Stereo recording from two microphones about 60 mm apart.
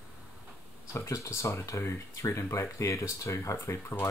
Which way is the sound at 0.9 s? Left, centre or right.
Left.